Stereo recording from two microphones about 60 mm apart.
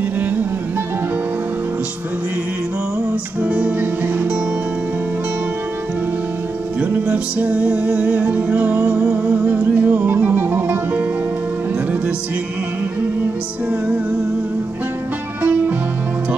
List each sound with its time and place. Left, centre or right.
3.4 s music: right
7.1 s music: right
15.4 s music: right